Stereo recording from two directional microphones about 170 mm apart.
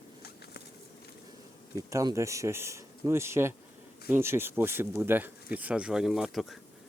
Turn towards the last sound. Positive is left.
turn(degrees=0)  # may be behind; listen again after turning